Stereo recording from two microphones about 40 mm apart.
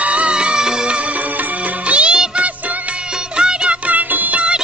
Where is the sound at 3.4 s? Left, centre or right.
Right.